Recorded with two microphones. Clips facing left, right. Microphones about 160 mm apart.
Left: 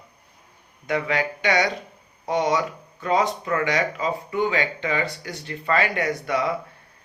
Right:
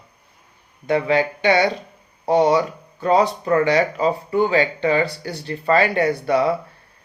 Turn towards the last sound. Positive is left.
turn(degrees=-30)  # may be behind; listen again after turning